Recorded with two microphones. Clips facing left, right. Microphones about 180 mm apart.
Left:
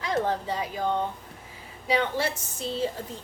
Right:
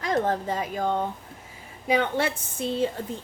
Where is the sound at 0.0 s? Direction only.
45° right (ahead or behind).